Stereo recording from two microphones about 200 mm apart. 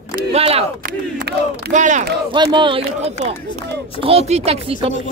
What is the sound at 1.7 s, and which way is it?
Speech, 40° right (ahead or behind).